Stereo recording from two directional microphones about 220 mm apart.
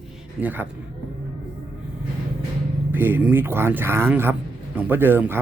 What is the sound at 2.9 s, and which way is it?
Speech, 10° right (ahead or behind).